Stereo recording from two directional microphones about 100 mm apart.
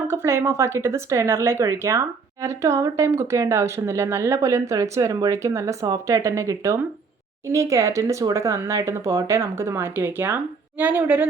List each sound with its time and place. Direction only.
0.1 s speech: 25° right (ahead or behind)